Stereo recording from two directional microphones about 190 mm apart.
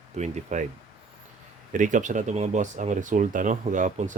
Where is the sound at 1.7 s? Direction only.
40° right (ahead or behind).